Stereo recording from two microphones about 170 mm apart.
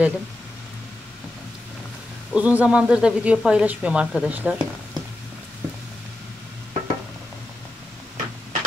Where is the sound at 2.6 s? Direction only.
5° right (ahead or behind).